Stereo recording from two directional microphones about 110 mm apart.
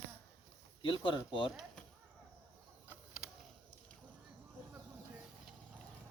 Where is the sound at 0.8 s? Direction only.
50° left (ahead or behind).